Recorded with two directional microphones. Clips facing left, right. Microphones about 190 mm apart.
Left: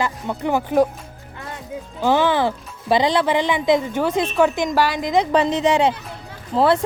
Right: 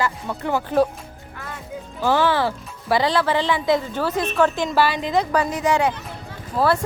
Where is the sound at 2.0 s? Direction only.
20° left (ahead or behind).